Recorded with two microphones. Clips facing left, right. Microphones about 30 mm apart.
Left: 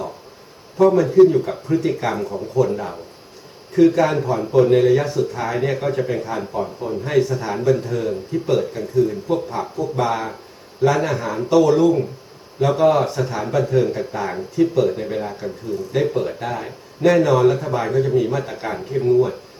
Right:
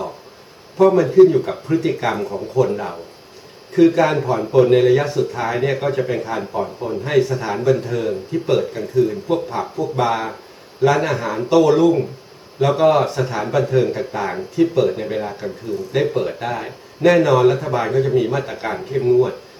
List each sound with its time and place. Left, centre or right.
0.9 s speech: centre